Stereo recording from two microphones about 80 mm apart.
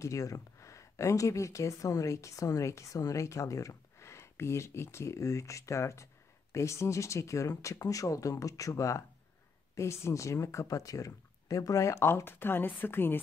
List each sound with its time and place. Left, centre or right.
0.0 s speech: left